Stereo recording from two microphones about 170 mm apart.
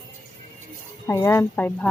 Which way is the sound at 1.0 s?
15° left (ahead or behind).